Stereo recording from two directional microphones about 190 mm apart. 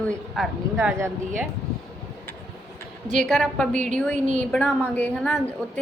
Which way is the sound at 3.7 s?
40° right (ahead or behind).